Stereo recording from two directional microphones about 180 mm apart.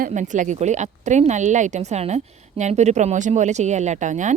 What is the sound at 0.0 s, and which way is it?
A woman's voice, 45° right (ahead or behind).